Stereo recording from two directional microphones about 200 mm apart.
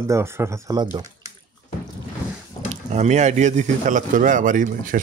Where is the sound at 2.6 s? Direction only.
35° right (ahead or behind).